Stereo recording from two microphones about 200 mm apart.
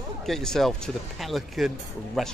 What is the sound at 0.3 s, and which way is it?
A man's voice, centre (ahead or behind).